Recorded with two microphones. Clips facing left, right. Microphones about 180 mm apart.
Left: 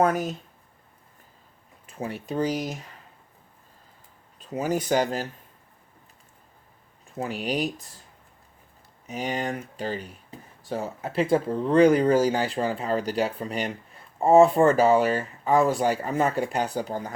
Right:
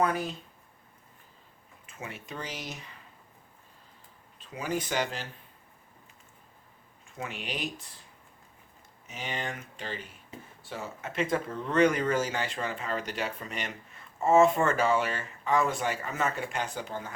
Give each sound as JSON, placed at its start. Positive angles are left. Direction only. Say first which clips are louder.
{"t": 0.0, "sound": "speech", "louder": "left 5 dB", "side_deg": 45}
{"t": 1.9, "sound": "a sound", "louder": "left 9 dB", "side_deg": 35}
{"t": 2.2, "sound": "speech", "louder": "left 15 dB", "side_deg": 40}
{"t": 4.4, "sound": "speech", "louder": "left 6 dB", "side_deg": 40}
{"t": 7.2, "sound": "speech", "louder": "left 9 dB", "side_deg": 35}
{"t": 9.0, "sound": "speech", "louder": "left 8 dB", "side_deg": 40}